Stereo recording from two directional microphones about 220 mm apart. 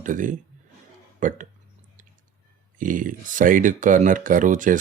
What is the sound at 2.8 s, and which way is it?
Speech, 35° right (ahead or behind).